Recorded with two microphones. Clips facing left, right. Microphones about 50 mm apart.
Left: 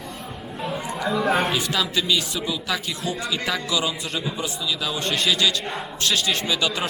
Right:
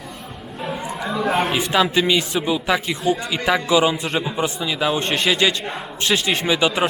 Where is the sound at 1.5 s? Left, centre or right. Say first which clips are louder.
Right 6 dB; right.